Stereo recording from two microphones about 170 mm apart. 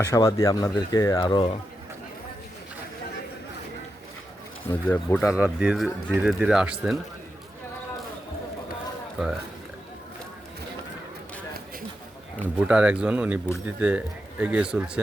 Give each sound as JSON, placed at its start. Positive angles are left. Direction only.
{"t": 0.0, "sound": "speech", "side_deg": 15}
{"t": 4.7, "sound": "speech", "side_deg": 10}
{"t": 5.3, "sound": "speech", "side_deg": -5}
{"t": 9.2, "sound": "speech", "side_deg": 0}
{"t": 12.5, "sound": "speech", "side_deg": -5}